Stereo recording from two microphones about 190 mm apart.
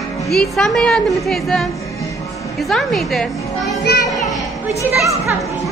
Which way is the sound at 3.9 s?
55° left (ahead or behind).